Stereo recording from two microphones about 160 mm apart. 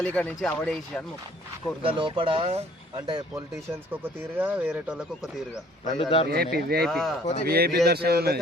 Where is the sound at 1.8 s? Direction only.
35° right (ahead or behind).